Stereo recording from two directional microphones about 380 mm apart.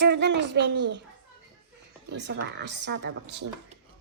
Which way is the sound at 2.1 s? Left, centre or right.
Right.